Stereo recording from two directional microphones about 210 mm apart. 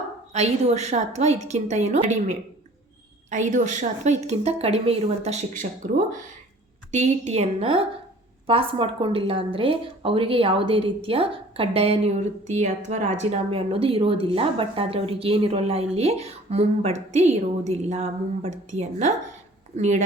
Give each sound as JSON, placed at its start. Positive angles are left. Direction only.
{"t": 0.3, "sound": "a woman's voice", "side_deg": -30}